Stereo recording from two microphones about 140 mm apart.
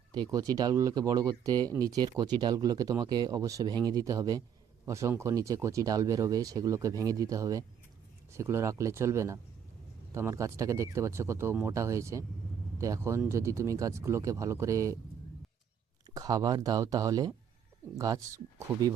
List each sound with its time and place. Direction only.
0.1 s speech: 30° right (ahead or behind)
16.1 s speech: 25° right (ahead or behind)